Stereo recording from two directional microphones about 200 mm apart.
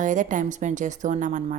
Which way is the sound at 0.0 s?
40° right (ahead or behind).